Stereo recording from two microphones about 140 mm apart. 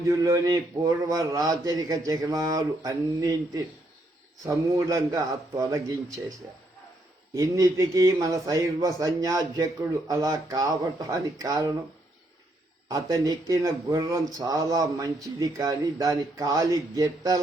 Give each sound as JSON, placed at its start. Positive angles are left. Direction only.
{"t": 0.0, "sound": "speech", "side_deg": -30}
{"t": 7.3, "sound": "speech", "side_deg": -25}
{"t": 12.9, "sound": "speech", "side_deg": -25}